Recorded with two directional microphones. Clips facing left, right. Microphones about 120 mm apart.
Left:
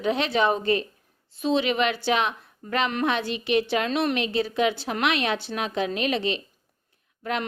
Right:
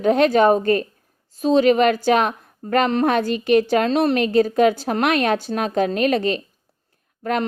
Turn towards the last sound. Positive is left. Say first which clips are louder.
# right 6 dB
turn(degrees=-45)  # may be behind; listen again after turning